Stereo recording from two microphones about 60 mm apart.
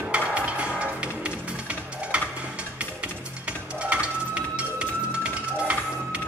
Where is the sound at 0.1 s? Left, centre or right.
Right.